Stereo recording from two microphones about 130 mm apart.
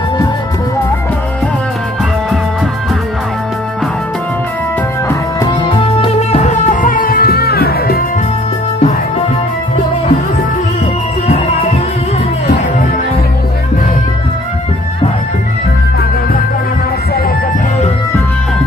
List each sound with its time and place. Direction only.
5.4 s music: 35° left (ahead or behind); by 7.2 s 90° left
11.2 s music: 55° left (ahead or behind)